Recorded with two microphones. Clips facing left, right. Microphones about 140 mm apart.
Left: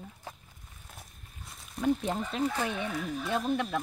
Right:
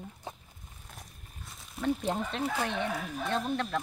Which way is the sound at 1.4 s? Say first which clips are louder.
Left 3 dB; centre (ahead or behind).